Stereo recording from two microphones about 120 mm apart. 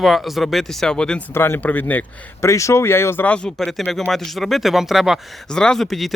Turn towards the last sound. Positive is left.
turn(degrees=0)  # may be behind; listen again after turning